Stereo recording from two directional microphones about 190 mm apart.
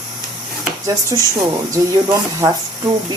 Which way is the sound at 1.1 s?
15° right (ahead or behind).